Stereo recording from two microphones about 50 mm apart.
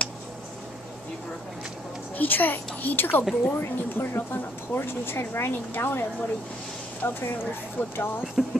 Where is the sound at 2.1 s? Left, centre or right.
Left.